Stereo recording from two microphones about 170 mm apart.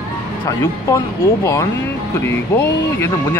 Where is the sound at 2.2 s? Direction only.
15° left (ahead or behind).